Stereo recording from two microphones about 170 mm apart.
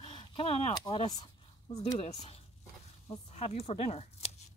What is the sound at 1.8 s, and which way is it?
Speech, 35° left (ahead or behind).